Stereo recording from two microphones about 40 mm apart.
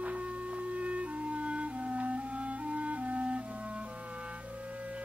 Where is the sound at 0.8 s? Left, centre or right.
Right.